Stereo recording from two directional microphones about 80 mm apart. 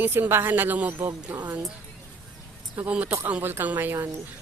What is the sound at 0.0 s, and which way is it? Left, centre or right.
A woman's voice, right.